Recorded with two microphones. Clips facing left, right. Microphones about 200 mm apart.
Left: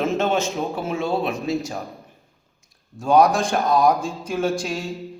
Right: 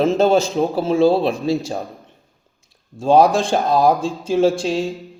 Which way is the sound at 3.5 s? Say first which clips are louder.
Right 3 dB; 30° right (ahead or behind).